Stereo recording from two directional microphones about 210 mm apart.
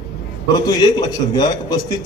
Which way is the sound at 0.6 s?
20° left (ahead or behind).